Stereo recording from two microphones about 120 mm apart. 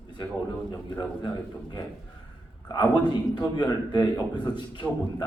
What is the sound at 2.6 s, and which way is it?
A man's voice, 35° left (ahead or behind).